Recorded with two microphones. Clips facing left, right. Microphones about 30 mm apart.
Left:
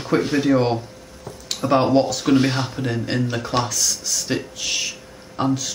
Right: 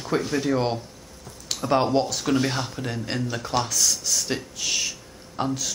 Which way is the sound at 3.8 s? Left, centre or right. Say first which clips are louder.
Even; centre.